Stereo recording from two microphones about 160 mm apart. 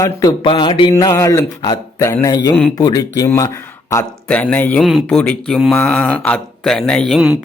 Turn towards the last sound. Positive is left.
turn(degrees=0)  # may be behind; listen again after turning